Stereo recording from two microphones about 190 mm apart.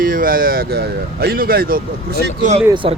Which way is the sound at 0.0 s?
45° right (ahead or behind).